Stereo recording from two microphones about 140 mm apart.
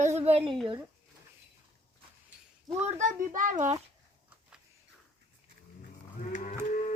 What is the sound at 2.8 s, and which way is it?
A child's voice, 65° right (ahead or behind).